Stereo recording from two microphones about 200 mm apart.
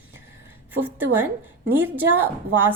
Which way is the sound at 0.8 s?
10° right (ahead or behind).